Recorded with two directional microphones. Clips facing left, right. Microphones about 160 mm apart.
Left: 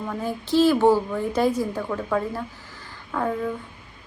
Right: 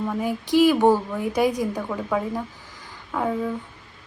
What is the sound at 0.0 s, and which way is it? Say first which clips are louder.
Speech: right 3 dB; 10° right (ahead or behind).